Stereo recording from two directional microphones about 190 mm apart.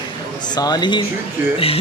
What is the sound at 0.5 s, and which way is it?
A man's voice, 20° left (ahead or behind).